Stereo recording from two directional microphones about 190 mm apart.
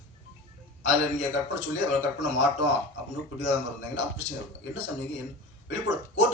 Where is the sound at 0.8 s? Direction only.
70° left (ahead or behind).